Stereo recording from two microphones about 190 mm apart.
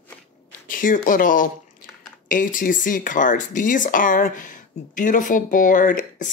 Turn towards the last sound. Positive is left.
turn(degrees=45)  # may be behind; listen again after turning